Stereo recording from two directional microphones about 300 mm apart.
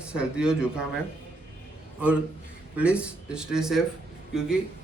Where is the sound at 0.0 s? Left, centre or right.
Centre.